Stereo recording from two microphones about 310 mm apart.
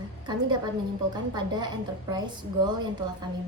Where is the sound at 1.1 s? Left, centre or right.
Centre.